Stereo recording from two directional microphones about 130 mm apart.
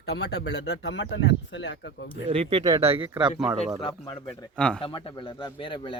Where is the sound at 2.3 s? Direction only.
45° right (ahead or behind).